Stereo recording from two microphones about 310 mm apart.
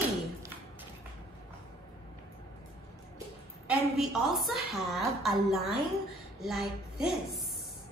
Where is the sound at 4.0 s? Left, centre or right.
Centre.